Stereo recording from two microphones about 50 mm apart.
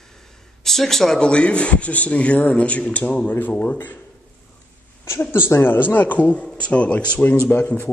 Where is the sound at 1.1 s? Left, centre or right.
Left.